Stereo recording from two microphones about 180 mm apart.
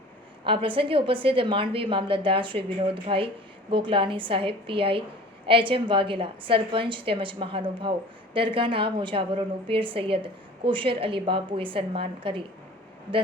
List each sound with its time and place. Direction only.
0.4 s a woman's voice: 30° right (ahead or behind)